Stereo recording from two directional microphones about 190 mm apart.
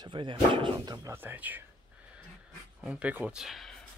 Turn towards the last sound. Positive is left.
turn(degrees=0)  # may be behind; listen again after turning